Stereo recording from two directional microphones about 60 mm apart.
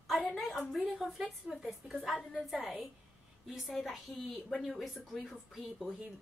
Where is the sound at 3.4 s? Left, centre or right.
Centre.